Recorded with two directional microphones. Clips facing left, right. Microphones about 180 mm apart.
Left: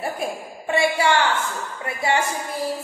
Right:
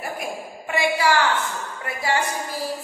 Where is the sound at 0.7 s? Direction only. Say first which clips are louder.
Left 2 dB; 25° left (ahead or behind).